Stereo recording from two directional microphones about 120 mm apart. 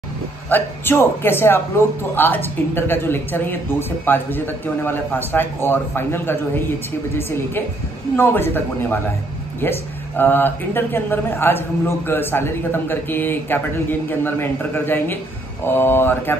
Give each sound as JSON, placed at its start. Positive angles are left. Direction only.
{"t": 0.5, "sound": "a woman's voice", "side_deg": 15}